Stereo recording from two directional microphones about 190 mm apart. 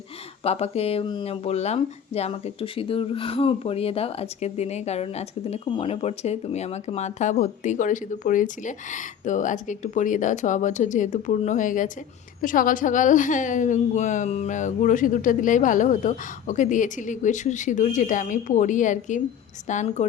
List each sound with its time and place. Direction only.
0.4 s a woman's voice: 30° left (ahead or behind)